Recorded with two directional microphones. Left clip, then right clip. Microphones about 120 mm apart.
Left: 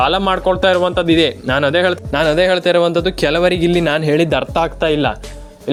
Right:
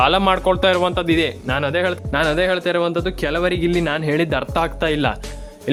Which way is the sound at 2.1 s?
25° left (ahead or behind).